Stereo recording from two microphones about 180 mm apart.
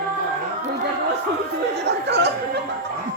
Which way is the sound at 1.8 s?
70° right (ahead or behind).